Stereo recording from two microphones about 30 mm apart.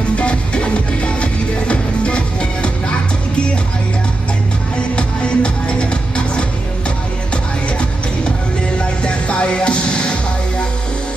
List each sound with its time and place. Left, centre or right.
0.1 s music: left
4.7 s music: left
8.7 s music: left